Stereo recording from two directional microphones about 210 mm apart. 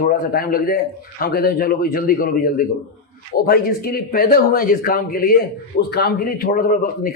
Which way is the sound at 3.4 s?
45° left (ahead or behind).